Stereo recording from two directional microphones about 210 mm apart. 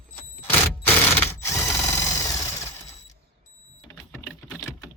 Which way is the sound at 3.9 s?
5° left (ahead or behind).